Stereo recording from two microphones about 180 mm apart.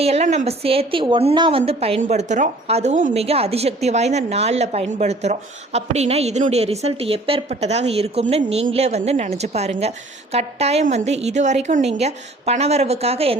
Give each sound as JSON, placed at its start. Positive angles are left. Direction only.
{"t": 0.0, "sound": "a woman's voice", "side_deg": -35}